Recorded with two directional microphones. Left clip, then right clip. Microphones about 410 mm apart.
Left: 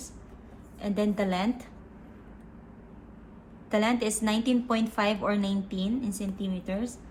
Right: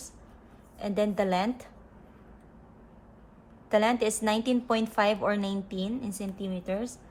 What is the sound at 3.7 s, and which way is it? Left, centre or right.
A woman's voice, centre.